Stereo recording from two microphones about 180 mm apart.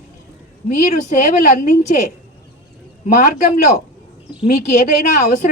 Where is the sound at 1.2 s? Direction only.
45° left (ahead or behind).